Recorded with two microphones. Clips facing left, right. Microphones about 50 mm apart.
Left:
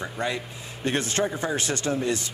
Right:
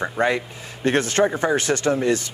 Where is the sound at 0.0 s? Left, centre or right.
Right.